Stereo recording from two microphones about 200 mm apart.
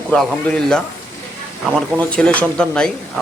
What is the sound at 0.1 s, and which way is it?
Speech, 5° left (ahead or behind).